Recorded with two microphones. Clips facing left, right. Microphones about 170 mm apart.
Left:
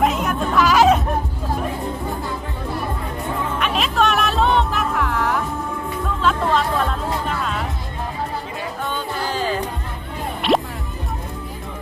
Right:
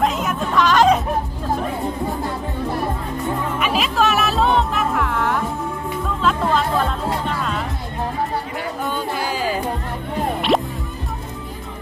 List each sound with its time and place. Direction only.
0.0 s music: centre (ahead or behind)
3.6 s music: centre (ahead or behind)
8.8 s music: 10° right (ahead or behind)